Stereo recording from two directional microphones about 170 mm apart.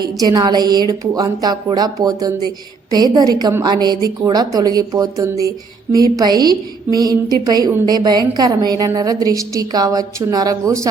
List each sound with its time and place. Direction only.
0.0 s a woman's voice: 25° right (ahead or behind)